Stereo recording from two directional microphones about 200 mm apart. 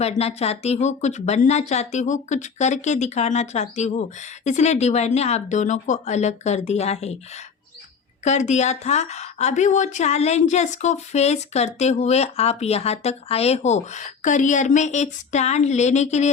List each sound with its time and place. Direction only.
0.0 s a woman's voice: 30° left (ahead or behind)